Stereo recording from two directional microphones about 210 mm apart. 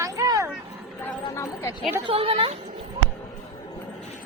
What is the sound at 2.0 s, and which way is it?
Speech, 25° right (ahead or behind).